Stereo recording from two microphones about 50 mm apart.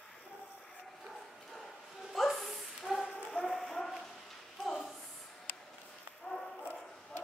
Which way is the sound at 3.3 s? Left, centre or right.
Centre.